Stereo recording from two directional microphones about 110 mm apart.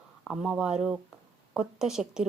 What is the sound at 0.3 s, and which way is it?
A woman's voice, 5° right (ahead or behind).